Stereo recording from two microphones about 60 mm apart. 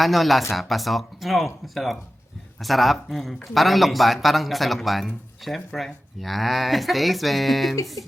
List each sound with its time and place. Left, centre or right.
0.0 s speech: centre
8.0 s speech: left